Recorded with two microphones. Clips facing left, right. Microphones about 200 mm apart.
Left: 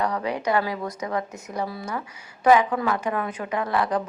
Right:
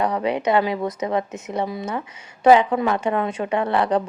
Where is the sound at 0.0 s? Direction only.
20° right (ahead or behind).